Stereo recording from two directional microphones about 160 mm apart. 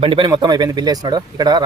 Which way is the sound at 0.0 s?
35° right (ahead or behind).